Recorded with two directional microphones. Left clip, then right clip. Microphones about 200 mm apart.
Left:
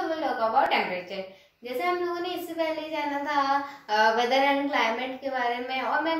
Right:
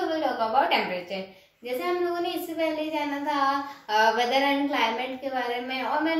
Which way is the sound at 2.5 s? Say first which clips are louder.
Right 1 dB; 15° left (ahead or behind).